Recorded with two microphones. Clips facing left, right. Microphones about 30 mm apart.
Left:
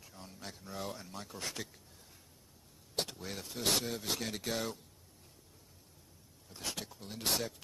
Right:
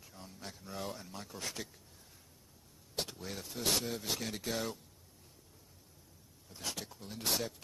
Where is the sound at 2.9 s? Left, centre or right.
Left.